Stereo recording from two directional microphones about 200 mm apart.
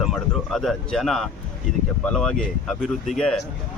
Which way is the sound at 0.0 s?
Centre (ahead or behind).